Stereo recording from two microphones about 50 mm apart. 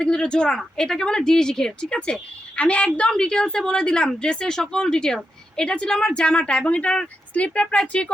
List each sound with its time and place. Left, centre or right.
0.0 s a woman's voice: centre